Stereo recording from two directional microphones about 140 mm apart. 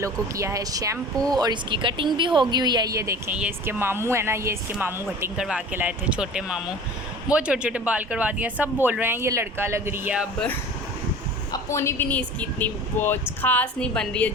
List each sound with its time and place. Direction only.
0.0 s speech: 20° right (ahead or behind)
5.4 s speech: 5° right (ahead or behind)
11.5 s speech: 20° left (ahead or behind)